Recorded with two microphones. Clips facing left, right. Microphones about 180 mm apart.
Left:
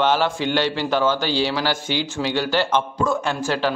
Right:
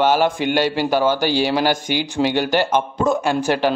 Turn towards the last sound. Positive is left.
turn(degrees=-15)  # may be behind; listen again after turning